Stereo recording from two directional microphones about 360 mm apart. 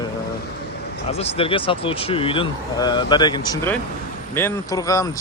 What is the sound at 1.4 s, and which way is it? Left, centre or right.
Speech, centre.